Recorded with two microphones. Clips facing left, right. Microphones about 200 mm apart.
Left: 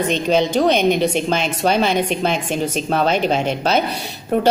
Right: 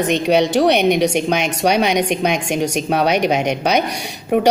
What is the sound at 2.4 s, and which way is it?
Speech, 75° right (ahead or behind).